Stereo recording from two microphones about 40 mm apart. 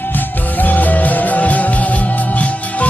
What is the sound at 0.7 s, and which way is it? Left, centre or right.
Music, left.